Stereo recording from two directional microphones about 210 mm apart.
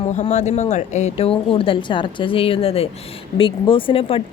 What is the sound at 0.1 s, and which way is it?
Speech, 35° left (ahead or behind).